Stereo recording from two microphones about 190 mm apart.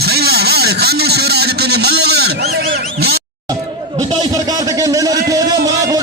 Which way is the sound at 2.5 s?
55° right (ahead or behind).